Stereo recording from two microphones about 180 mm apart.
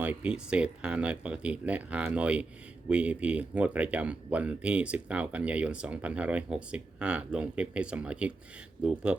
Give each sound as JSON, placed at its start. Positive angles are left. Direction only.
{"t": 0.0, "sound": "speech", "side_deg": -10}